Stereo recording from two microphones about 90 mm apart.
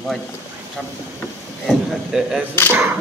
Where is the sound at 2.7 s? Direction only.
25° right (ahead or behind).